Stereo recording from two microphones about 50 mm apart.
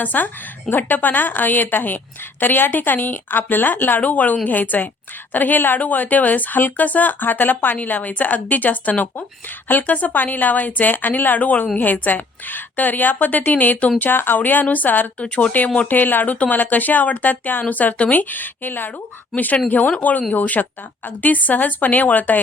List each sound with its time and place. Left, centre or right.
0.0 s speech: left
14.0 s speech: left
15.2 s speech: left